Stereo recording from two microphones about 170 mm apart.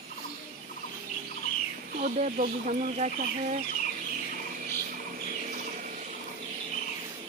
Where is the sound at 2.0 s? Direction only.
45° right (ahead or behind).